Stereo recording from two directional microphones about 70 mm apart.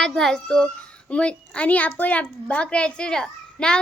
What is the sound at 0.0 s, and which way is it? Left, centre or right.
A child's voice, centre.